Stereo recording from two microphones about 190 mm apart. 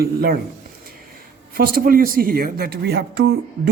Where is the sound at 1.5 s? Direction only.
50° right (ahead or behind).